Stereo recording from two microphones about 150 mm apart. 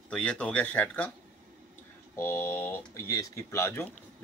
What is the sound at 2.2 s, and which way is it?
Speech, 15° left (ahead or behind).